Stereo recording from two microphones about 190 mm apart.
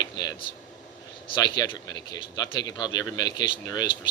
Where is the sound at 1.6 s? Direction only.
20° left (ahead or behind).